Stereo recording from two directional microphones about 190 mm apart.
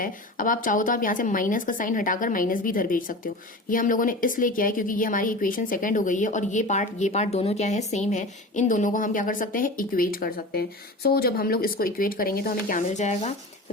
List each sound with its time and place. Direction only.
0.0 s a woman's voice: 45° left (ahead or behind)